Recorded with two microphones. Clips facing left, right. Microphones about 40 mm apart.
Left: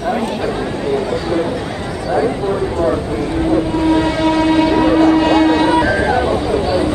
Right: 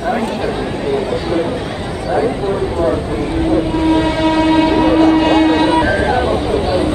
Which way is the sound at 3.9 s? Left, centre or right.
Centre.